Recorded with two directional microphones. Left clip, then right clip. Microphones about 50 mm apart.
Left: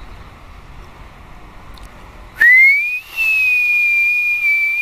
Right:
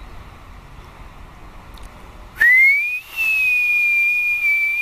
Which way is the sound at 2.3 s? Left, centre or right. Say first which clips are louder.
Left 3 dB; centre.